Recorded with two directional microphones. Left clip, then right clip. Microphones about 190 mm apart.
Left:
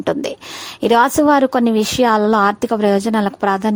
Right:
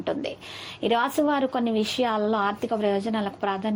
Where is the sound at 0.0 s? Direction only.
50° left (ahead or behind).